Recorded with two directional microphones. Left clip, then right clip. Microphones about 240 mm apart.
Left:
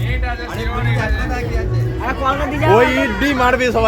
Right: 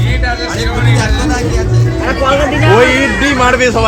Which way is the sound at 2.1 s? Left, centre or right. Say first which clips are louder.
Right 7 dB; left.